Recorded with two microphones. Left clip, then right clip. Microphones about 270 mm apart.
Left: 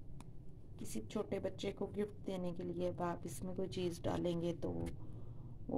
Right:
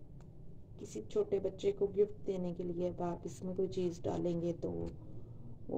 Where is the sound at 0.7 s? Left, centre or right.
Left.